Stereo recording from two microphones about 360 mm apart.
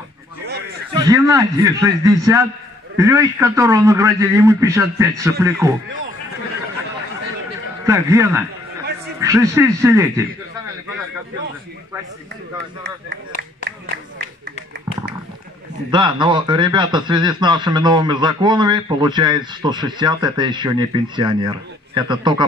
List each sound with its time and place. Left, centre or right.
0.9 s a man's voice: centre
7.8 s a man's voice: centre
12.8 s speech: right
15.9 s a man's voice: centre